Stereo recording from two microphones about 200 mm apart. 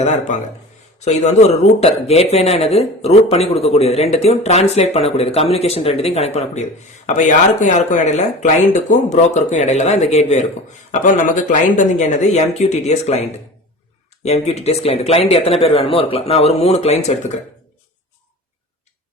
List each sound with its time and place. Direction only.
0.0 s speech: 35° left (ahead or behind)
11.8 s speech: 35° left (ahead or behind)
14.3 s speech: 35° left (ahead or behind)